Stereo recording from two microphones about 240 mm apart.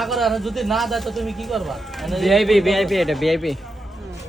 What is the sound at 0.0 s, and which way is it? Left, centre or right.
Speech, centre.